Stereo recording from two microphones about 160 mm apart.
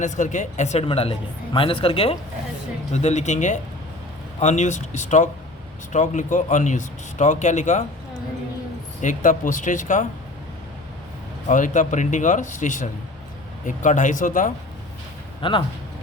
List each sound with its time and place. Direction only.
0.0 s speech: 50° left (ahead or behind)
9.0 s speech: 55° left (ahead or behind)
11.4 s speech: 50° left (ahead or behind)
15.4 s speech: 30° left (ahead or behind)